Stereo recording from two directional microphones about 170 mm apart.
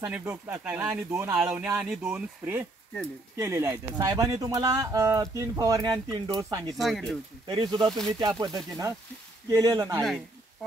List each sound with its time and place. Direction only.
0.0 s speech: 10° right (ahead or behind)
6.8 s speech: centre (ahead or behind)
7.4 s speech: 25° right (ahead or behind)
9.5 s speech: 20° right (ahead or behind)